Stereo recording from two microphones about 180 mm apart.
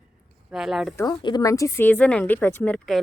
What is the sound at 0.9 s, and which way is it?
Speech, 20° left (ahead or behind).